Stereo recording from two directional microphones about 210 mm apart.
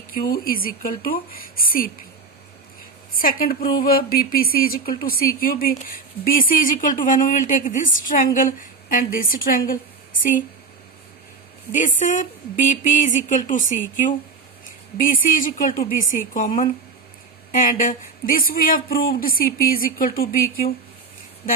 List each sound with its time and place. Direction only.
0.1 s speech: 45° left (ahead or behind)
3.2 s a woman's voice: 45° left (ahead or behind)
11.7 s a woman's voice: 35° left (ahead or behind)